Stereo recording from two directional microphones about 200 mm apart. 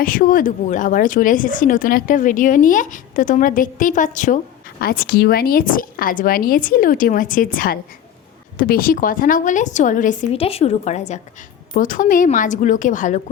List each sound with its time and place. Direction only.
0.0 s speech: 45° left (ahead or behind)